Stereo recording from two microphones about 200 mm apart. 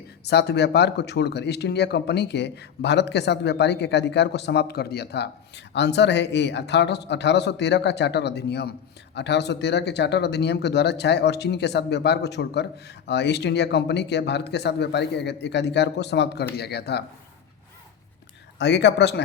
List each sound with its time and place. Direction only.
0.3 s speech: 55° left (ahead or behind)
18.6 s speech: 60° left (ahead or behind)